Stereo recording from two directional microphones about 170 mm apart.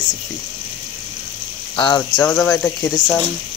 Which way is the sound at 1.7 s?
30° left (ahead or behind).